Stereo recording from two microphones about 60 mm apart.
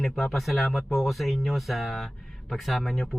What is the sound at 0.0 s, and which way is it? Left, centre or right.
Speech, centre.